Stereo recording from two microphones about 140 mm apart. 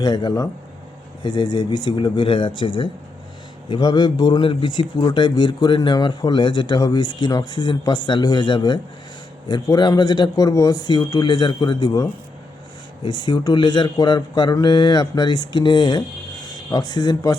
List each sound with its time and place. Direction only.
0.0 s speech: 30° left (ahead or behind)